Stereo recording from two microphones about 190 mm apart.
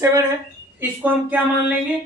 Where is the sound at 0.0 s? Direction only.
15° right (ahead or behind).